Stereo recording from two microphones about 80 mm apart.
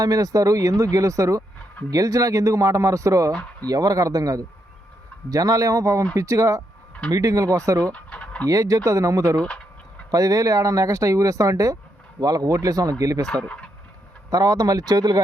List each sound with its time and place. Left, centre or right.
0.0 s speech: right
7.9 s chicken: centre
8.4 s speech: right
13.2 s speech: centre
14.3 s speech: right